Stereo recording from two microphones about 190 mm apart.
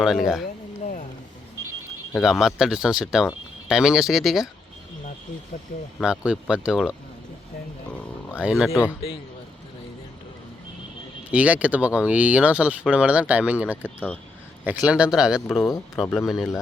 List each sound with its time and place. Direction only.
0.0 s speech: centre (ahead or behind)
0.4 s a sound: 50° left (ahead or behind)
2.2 s speech: 5° right (ahead or behind)
6.0 s speech: 5° right (ahead or behind)
8.4 s speech: 5° right (ahead or behind)
11.3 s speech: 5° right (ahead or behind)